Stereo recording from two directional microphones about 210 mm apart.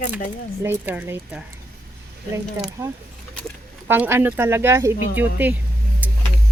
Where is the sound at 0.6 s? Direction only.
10° right (ahead or behind).